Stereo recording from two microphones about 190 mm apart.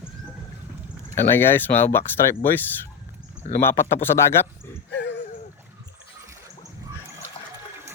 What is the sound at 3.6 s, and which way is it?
Speech, 10° left (ahead or behind).